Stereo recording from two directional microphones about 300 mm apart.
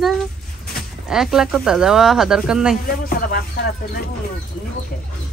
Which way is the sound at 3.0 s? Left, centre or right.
Left.